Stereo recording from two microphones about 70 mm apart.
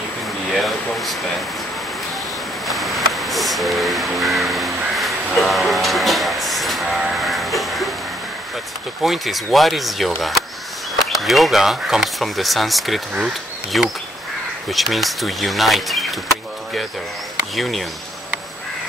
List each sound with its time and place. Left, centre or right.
0.5 s a sound: centre
2.6 s crow: centre
9.0 s speech: centre
17.6 s speech: centre